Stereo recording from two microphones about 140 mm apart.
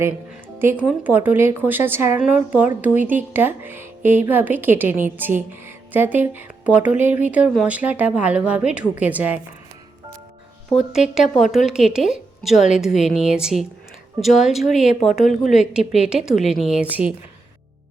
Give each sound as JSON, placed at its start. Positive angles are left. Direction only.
{"t": 0.6, "sound": "a woman's voice", "side_deg": -15}
{"t": 10.7, "sound": "a woman's voice", "side_deg": 0}
{"t": 15.3, "sound": "a woman's voice", "side_deg": 65}
{"t": 15.7, "sound": "a woman's voice", "side_deg": -5}